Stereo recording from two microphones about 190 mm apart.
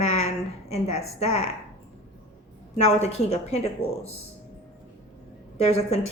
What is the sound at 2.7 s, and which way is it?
Speech, 35° left (ahead or behind).